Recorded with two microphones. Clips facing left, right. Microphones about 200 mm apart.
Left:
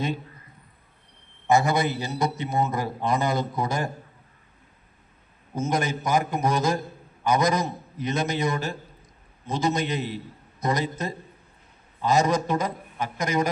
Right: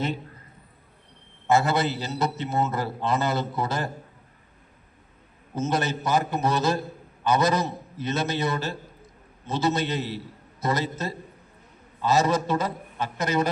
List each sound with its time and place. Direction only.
1.5 s a man's voice: 15° left (ahead or behind)
5.5 s a man's voice: 10° left (ahead or behind)